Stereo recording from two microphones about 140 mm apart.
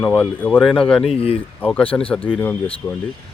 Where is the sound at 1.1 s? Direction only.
45° left (ahead or behind).